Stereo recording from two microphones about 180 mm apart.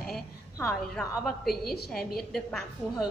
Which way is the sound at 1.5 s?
60° left (ahead or behind).